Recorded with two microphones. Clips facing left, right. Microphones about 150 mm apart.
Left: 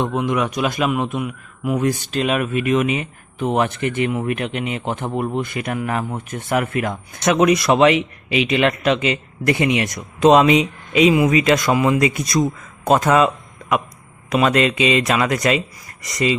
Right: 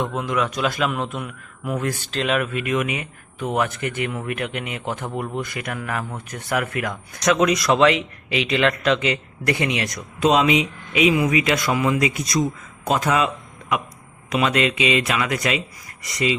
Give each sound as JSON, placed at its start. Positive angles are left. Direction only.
{"t": 0.0, "sound": "a man's voice", "side_deg": 20}
{"t": 10.2, "sound": "speech", "side_deg": 45}
{"t": 11.7, "sound": "a man's voice", "side_deg": 25}
{"t": 11.9, "sound": "speech", "side_deg": 50}